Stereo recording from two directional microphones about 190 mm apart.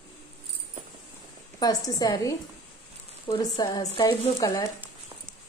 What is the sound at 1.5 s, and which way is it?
Speech, 20° left (ahead or behind).